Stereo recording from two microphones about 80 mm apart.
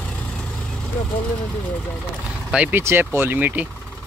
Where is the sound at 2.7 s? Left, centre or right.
Right.